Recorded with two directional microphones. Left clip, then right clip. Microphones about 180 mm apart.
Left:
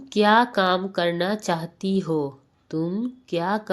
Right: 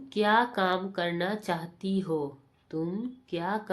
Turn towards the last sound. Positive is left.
turn(degrees=35)  # may be behind; listen again after turning